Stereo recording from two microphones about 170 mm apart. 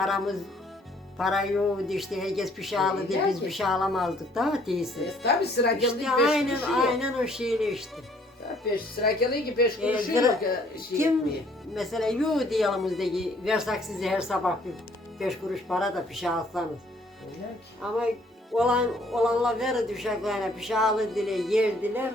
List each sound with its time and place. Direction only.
0.0 s a man's voice: centre (ahead or behind)
5.0 s speech: 70° left (ahead or behind)
5.8 s a man's voice: 5° right (ahead or behind)
8.7 s speech: 65° left (ahead or behind)
9.9 s speech: 5° right (ahead or behind)
11.7 s a man's voice: centre (ahead or behind)
17.8 s a man's voice: 5° right (ahead or behind)